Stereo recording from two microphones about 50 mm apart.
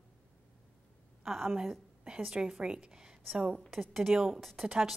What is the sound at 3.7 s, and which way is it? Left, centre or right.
Speech, centre.